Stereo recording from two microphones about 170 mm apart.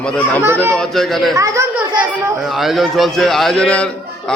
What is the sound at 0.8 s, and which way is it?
Speech, centre (ahead or behind).